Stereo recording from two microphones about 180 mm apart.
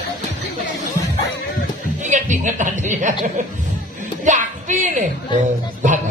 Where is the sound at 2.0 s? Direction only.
45° right (ahead or behind).